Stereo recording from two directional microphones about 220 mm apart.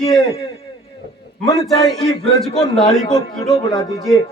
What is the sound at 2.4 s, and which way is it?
Speech, centre (ahead or behind).